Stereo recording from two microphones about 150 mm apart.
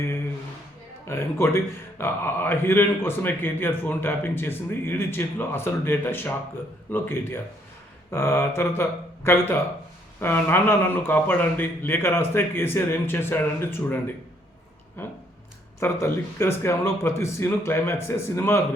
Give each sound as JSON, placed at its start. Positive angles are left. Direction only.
{"t": 1.0, "sound": "speech", "side_deg": 15}
{"t": 15.0, "sound": "speech", "side_deg": 15}